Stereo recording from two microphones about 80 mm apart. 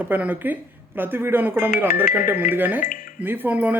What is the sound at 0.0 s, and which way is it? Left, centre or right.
Speech, right.